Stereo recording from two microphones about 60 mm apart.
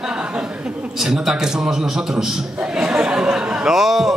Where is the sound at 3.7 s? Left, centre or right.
Centre.